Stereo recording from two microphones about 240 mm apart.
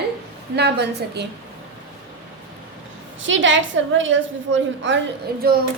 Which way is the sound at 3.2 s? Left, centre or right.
Right.